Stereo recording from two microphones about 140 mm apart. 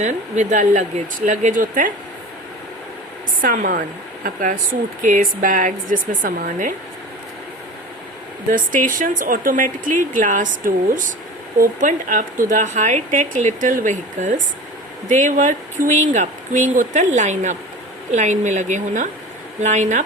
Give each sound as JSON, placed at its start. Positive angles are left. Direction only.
{"t": 0.0, "sound": "speech", "side_deg": -65}
{"t": 3.4, "sound": "speech", "side_deg": -75}
{"t": 5.0, "sound": "speech", "side_deg": -70}
{"t": 8.4, "sound": "speech", "side_deg": -70}